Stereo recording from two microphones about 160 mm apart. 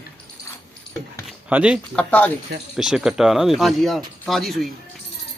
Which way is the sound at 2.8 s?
5° right (ahead or behind).